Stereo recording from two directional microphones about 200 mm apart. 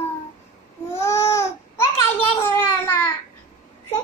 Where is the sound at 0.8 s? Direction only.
15° left (ahead or behind).